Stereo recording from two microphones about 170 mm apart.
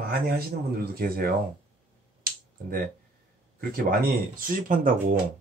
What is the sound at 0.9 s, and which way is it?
Speech, 65° right (ahead or behind).